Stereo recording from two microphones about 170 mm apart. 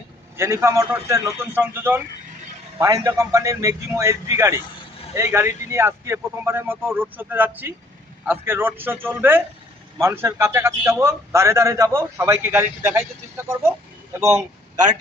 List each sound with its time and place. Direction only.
0.3 s a man's voice: 15° right (ahead or behind)